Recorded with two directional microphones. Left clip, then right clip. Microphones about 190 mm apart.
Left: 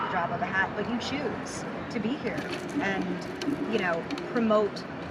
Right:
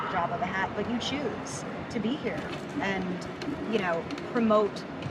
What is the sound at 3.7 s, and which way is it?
Speech, 5° right (ahead or behind).